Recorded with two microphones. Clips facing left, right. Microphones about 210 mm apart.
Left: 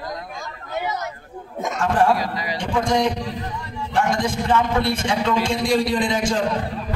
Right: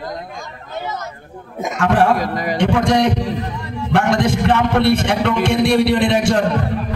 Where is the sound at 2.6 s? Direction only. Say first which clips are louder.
Right 5 dB; 75° right (ahead or behind).